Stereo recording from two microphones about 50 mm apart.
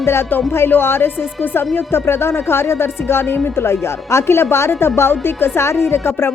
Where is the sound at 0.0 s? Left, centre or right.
Left.